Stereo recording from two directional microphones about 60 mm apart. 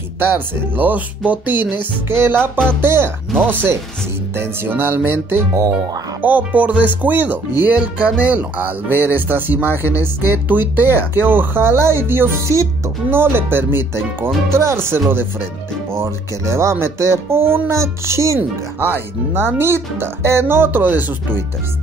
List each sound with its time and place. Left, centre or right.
0.2 s speech: right
4.4 s speech: right
6.2 s speech: right
8.6 s speech: right
12.4 s speech: right
13.1 s speech: right
18.8 s speech: right